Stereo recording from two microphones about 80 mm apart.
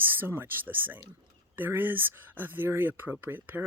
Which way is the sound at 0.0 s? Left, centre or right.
Right.